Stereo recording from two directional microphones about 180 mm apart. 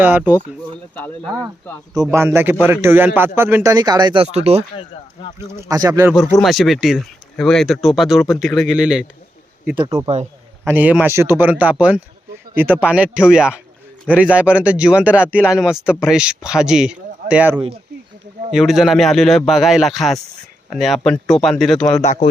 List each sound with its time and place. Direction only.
0.0 s speech: 10° right (ahead or behind)
0.9 s speech: 10° left (ahead or behind)
1.9 s speech: 20° right (ahead or behind); by 4.6 s 35° right (ahead or behind)
5.4 s speech: 15° right (ahead or behind)
6.4 s speech: centre (ahead or behind)
9.7 s speech: 20° right (ahead or behind)
10.7 s speech: 10° right (ahead or behind)
22.0 s speech: 40° left (ahead or behind)